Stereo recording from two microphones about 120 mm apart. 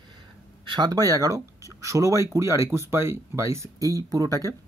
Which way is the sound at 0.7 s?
35° right (ahead or behind).